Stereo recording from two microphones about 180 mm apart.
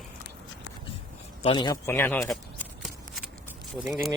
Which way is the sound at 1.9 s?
10° left (ahead or behind).